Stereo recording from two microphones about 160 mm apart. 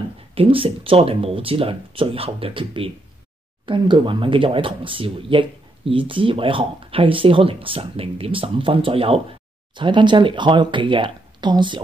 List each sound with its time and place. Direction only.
0.3 s speech: 35° right (ahead or behind)